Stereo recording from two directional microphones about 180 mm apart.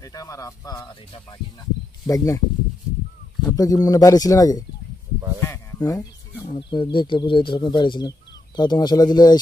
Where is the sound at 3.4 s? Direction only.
20° left (ahead or behind).